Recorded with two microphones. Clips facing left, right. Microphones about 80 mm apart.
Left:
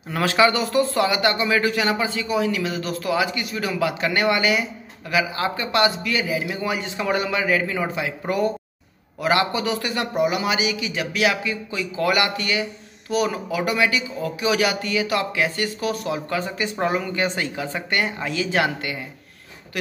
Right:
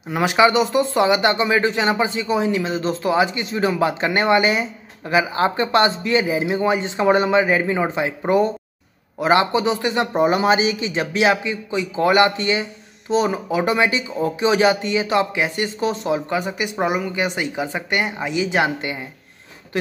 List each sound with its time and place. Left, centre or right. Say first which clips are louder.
0.1 s speech: right 3 dB; centre